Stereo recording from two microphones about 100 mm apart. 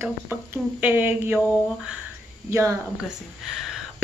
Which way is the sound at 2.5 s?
35° right (ahead or behind).